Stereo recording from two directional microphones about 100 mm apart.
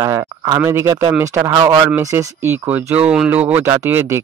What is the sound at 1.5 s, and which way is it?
Speech, 40° right (ahead or behind).